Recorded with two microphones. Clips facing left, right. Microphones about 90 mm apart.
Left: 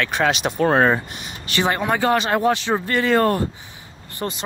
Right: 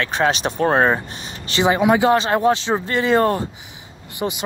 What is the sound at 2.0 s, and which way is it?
Speech, 25° right (ahead or behind).